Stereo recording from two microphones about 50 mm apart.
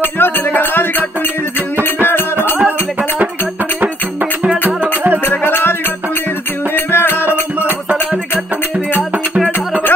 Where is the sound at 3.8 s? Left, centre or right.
Right.